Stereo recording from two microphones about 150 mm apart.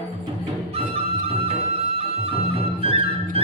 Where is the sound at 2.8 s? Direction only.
40° right (ahead or behind).